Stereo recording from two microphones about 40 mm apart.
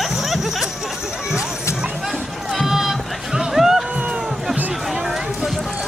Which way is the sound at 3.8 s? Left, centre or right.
Right.